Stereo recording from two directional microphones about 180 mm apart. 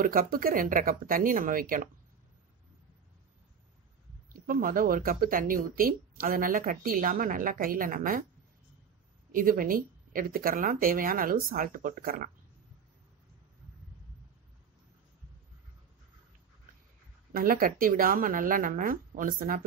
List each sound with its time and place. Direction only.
0.0 s speech: 50° right (ahead or behind)
4.5 s speech: 50° right (ahead or behind)
9.3 s speech: 50° right (ahead or behind)
17.3 s speech: 50° right (ahead or behind)